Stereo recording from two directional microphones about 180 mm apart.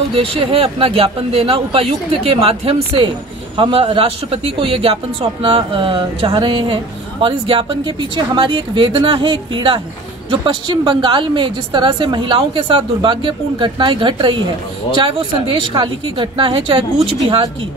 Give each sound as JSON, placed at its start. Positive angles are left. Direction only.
{"t": 0.1, "sound": "a man's voice", "side_deg": -30}